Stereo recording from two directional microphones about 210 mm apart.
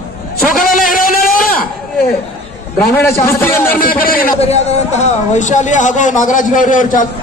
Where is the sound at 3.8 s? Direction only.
45° left (ahead or behind).